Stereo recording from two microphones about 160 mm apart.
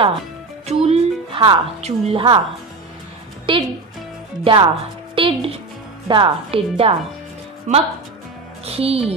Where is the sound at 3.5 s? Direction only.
30° right (ahead or behind).